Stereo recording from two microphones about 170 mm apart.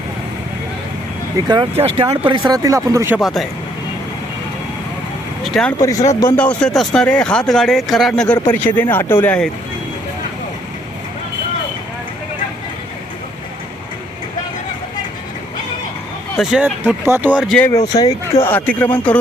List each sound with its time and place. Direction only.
1.5 s speech: 30° right (ahead or behind)
3.2 s speech: centre (ahead or behind)
5.4 s speech: centre (ahead or behind)
5.8 s speech: 20° left (ahead or behind)
6.3 s speech: 5° left (ahead or behind)
16.4 s speech: centre (ahead or behind)
17.4 s speech: 5° left (ahead or behind)
17.7 s speech: 20° left (ahead or behind)
18.4 s a man's voice: 10° left (ahead or behind)